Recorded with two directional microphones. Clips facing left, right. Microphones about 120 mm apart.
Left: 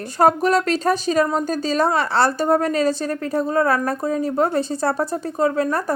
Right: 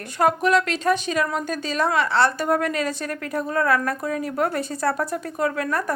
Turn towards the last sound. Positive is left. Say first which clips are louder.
# left 4 dB
turn(degrees=30)  # may be behind; listen again after turning